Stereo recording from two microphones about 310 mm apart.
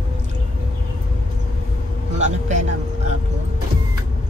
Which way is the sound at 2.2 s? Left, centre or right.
Right.